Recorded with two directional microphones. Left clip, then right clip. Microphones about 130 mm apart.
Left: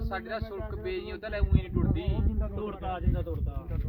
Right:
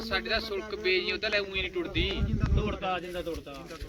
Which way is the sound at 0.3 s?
50° left (ahead or behind).